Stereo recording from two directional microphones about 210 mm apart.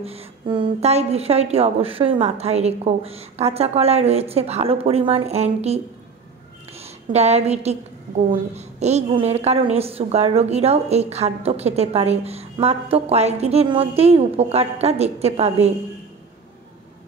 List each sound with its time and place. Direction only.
0.0 s a woman's voice: 30° right (ahead or behind)
6.8 s a woman's voice: 30° right (ahead or behind)